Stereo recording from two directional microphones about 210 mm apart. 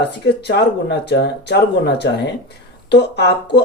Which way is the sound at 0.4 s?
55° left (ahead or behind).